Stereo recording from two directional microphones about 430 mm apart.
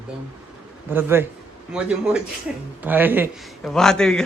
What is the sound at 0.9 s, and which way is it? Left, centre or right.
A man's voice, centre.